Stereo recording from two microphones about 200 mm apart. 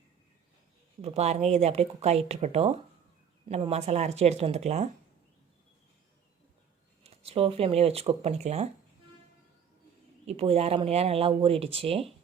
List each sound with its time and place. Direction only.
1.0 s speech: 30° right (ahead or behind)
7.0 s speech: 30° right (ahead or behind)
10.2 s speech: 30° right (ahead or behind)